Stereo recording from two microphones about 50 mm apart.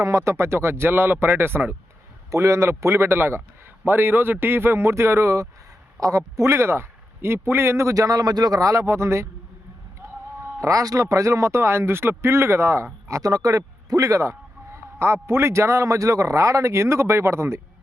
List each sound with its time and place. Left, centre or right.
0.0 s speech: right
2.3 s a man's voice: right
10.6 s a man's voice: right